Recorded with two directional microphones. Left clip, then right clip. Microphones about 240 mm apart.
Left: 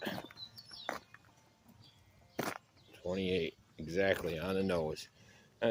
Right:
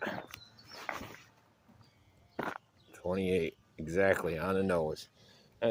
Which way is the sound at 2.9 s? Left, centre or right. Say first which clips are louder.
Right 3 dB; centre.